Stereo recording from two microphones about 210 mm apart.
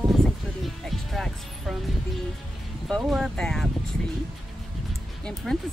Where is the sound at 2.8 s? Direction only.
Centre (ahead or behind).